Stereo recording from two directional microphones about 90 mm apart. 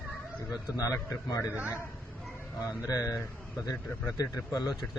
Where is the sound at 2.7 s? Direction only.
40° left (ahead or behind).